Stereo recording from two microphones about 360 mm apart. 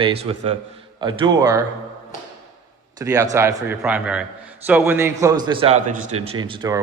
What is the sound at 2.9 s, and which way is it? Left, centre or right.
A man's voice, centre.